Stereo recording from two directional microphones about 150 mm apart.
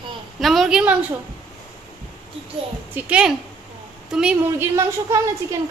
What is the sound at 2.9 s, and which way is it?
A woman's voice, 5° right (ahead or behind).